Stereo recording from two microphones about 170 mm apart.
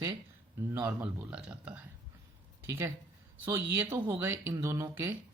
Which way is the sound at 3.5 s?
15° right (ahead or behind).